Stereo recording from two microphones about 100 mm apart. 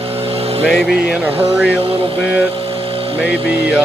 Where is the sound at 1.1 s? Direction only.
20° right (ahead or behind).